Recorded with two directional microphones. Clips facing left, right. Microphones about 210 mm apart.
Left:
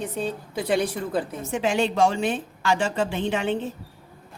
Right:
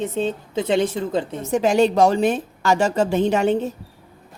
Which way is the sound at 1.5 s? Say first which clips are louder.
Right 7 dB; 40° right (ahead or behind).